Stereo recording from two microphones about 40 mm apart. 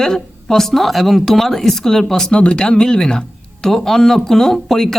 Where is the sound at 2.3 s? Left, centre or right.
Left; by 4.9 s centre.